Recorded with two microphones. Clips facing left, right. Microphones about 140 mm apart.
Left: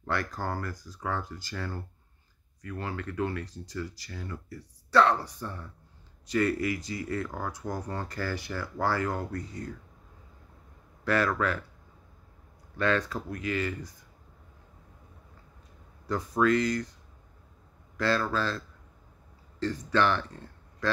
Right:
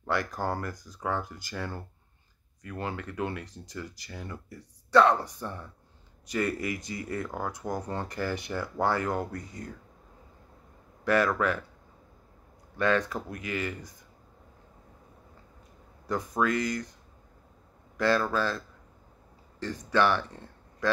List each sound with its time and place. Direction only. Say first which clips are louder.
0.0 s speech: right 2 dB; 15° right (ahead or behind)
11.1 s speech: right 2 dB; 15° right (ahead or behind)
12.7 s speech: right 1 dB; 15° right (ahead or behind)
16.1 s speech: left 3 dB; 15° right (ahead or behind)
17.9 s speech: right 2 dB; 15° right (ahead or behind)
19.6 s speech: even; 15° right (ahead or behind)